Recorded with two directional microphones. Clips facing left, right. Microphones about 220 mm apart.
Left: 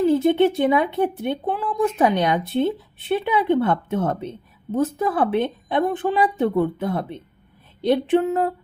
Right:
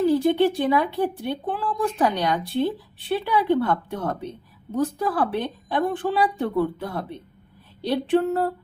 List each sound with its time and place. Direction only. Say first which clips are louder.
0.0 s speech: left 2 dB; 20° left (ahead or behind)